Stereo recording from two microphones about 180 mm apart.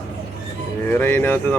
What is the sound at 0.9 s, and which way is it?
Speech, 10° left (ahead or behind).